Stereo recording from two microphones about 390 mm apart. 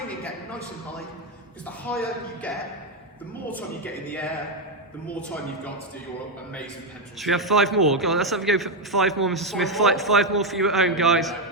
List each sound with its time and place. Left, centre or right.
1.9 s a man's voice: centre
5.0 s a man's voice: centre
7.2 s a man's voice: centre